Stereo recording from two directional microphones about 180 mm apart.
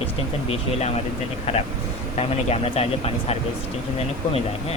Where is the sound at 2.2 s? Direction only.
35° left (ahead or behind).